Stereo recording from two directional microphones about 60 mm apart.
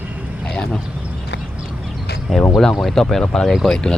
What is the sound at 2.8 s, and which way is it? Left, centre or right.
Speech, centre.